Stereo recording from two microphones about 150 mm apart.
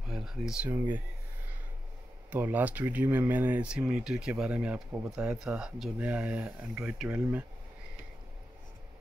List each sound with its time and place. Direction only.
0.1 s speech: 5° right (ahead or behind)
2.3 s speech: 10° right (ahead or behind)